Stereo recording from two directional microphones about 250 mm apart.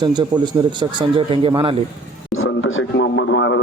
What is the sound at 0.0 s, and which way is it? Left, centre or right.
A man's voice, centre.